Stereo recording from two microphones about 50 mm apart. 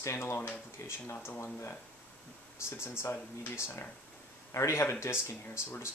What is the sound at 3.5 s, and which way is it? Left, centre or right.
Speech, left.